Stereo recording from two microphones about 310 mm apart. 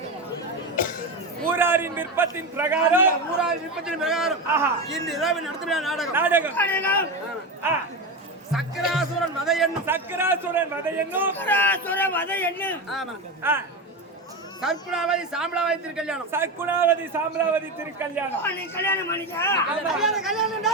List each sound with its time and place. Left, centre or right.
0.8 s a sound: left
1.4 s a man's voice: centre
6.6 s a man's voice: centre
7.6 s a man's voice: centre
11.3 s a man's voice: centre
18.7 s a man's voice: centre